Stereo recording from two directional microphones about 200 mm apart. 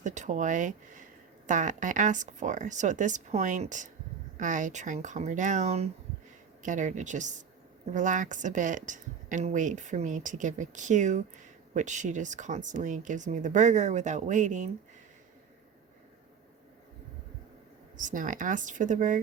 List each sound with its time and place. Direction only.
0.0 s speech: 35° right (ahead or behind)
17.9 s speech: 40° right (ahead or behind)